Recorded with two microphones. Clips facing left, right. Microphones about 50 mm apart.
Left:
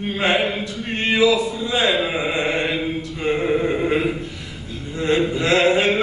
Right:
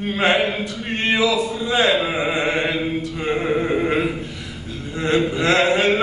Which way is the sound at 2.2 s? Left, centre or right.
Right.